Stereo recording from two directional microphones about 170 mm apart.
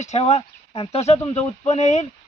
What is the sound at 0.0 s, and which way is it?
A man's voice, 40° left (ahead or behind).